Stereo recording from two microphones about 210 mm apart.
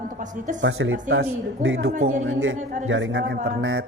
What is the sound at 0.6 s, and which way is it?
Mantra, 70° right (ahead or behind).